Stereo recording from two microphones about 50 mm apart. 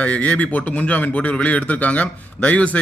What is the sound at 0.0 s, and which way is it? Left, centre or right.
A man's voice, left.